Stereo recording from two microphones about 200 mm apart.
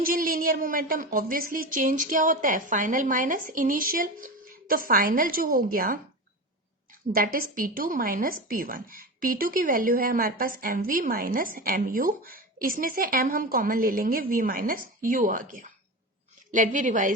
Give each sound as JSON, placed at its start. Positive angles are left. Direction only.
{"t": 0.0, "sound": "speech", "side_deg": -45}
{"t": 7.1, "sound": "a woman's voice", "side_deg": -45}